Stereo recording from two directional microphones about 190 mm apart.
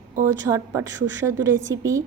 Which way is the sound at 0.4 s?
15° right (ahead or behind).